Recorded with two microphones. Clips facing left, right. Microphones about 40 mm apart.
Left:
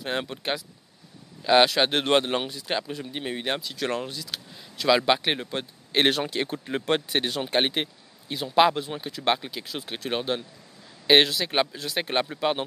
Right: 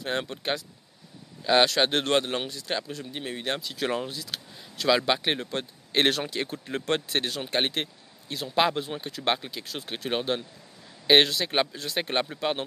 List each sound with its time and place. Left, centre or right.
0.0 s speech: centre
2.0 s speech: left
2.4 s speech: centre
3.6 s speech: centre
5.0 s speech: centre
6.3 s speech: left
8.7 s speech: centre